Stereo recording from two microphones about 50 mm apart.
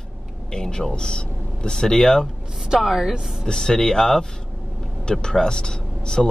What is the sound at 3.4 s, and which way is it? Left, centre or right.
Speech, centre.